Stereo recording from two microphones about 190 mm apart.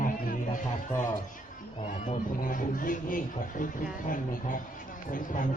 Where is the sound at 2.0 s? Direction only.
45° left (ahead or behind).